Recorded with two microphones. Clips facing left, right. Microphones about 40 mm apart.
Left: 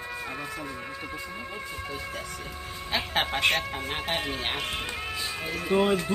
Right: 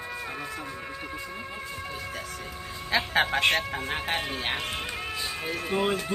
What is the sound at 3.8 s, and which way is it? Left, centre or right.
Speech, right.